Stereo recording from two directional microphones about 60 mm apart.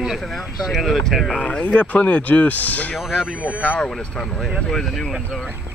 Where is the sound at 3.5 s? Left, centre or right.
Left.